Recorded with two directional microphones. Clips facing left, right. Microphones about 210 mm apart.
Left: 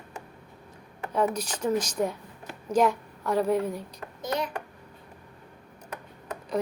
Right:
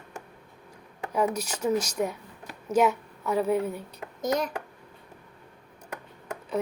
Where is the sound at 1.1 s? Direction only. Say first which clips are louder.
Even; 10° right (ahead or behind).